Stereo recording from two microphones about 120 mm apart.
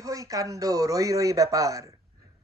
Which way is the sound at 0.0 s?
30° right (ahead or behind).